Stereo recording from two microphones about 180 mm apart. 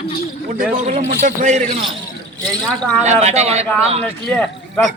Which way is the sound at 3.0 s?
40° right (ahead or behind).